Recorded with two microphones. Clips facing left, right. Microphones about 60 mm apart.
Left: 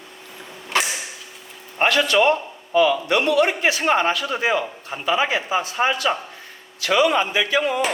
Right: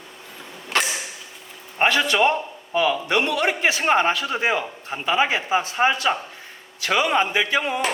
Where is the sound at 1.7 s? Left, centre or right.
Centre.